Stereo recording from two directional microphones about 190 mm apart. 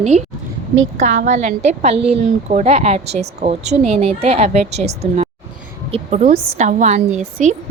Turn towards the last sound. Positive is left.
turn(degrees=-40)  # may be behind; listen again after turning